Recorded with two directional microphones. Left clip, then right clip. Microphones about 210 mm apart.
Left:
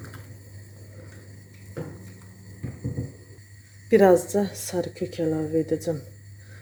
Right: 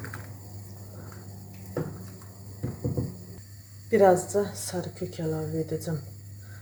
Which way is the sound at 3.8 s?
50° left (ahead or behind).